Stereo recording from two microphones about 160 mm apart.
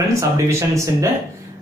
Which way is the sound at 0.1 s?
20° right (ahead or behind).